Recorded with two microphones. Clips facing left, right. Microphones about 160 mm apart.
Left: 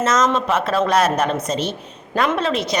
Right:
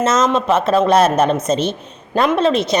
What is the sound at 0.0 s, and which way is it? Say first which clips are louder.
A woman's voice: right 2 dB; 25° right (ahead or behind).